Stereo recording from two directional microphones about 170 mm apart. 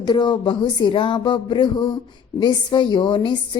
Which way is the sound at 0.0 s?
25° left (ahead or behind).